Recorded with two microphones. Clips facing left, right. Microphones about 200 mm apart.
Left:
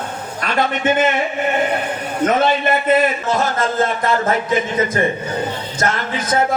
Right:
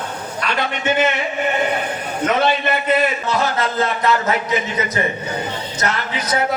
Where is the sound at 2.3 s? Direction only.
50° left (ahead or behind).